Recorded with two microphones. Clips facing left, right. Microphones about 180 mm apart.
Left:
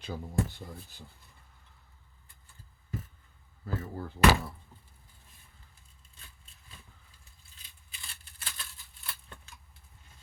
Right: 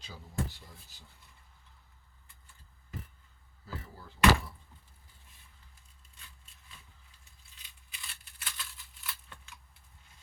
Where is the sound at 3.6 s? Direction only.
55° left (ahead or behind).